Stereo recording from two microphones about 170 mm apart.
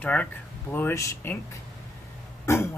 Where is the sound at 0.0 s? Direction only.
5° left (ahead or behind).